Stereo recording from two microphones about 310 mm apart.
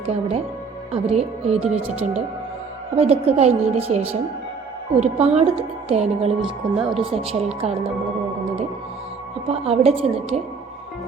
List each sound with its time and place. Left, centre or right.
0.1 s a woman's voice: centre
2.9 s a woman's voice: centre
6.4 s speech: centre
7.0 s a woman's voice: centre
9.5 s a woman's voice: centre